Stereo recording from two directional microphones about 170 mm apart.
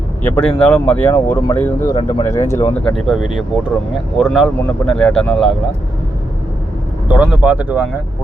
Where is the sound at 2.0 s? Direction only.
30° left (ahead or behind).